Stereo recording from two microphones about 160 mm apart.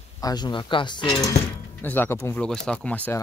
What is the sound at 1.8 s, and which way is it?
Speech, 10° left (ahead or behind).